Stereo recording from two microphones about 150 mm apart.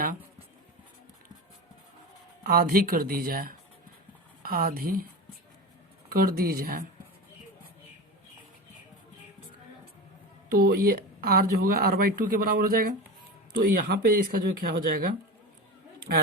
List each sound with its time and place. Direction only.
2.4 s speech: 90° right
6.1 s speech: 85° right
10.5 s speech: 90° right; by 15.1 s 70° right (ahead or behind)
16.1 s speech: 80° right